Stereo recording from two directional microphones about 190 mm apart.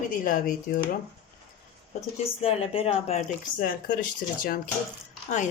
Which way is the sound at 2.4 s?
30° left (ahead or behind).